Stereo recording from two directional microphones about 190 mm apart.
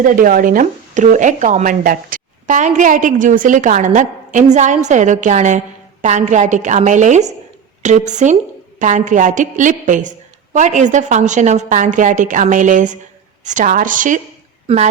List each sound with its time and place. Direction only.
0.0 s a woman's voice: 45° right (ahead or behind)